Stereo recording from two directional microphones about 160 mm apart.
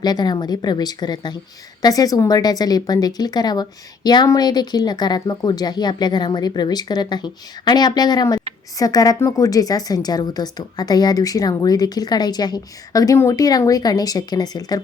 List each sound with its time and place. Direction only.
0.0 s speech: 25° left (ahead or behind)